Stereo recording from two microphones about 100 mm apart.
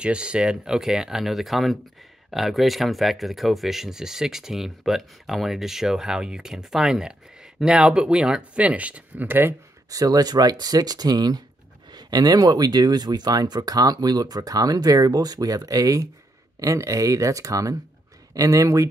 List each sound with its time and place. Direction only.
0.0 s speech: 10° right (ahead or behind)
9.8 s speech: 40° right (ahead or behind)